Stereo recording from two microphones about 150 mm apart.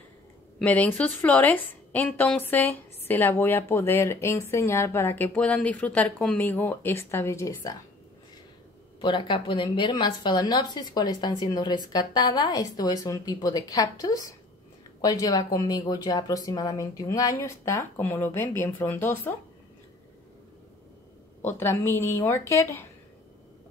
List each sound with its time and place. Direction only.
0.6 s speech: 10° left (ahead or behind)
9.0 s a woman's voice: 35° left (ahead or behind); by 19.3 s 15° left (ahead or behind)
21.4 s speech: 15° left (ahead or behind)